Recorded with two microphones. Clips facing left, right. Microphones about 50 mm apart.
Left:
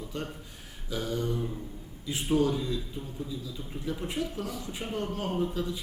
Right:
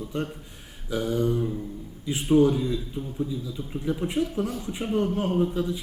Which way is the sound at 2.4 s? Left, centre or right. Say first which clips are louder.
Right 6 dB; centre.